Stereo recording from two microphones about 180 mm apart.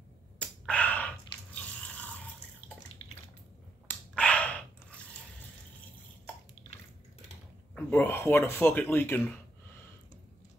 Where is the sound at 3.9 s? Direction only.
5° left (ahead or behind).